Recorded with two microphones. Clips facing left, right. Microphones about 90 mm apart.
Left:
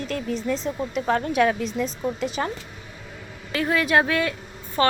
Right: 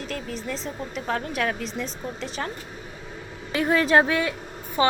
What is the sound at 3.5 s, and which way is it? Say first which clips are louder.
Speech: right 1 dB; 25° right (ahead or behind).